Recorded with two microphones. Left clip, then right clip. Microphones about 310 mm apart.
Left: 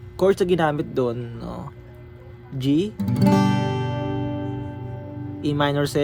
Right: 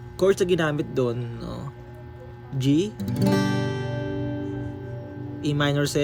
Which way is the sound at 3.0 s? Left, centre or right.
Left.